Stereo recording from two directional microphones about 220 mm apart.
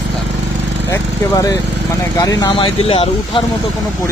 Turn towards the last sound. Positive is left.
turn(degrees=25)  # may be behind; listen again after turning